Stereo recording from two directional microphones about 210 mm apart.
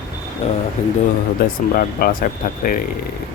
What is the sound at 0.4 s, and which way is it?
Speech, 30° left (ahead or behind).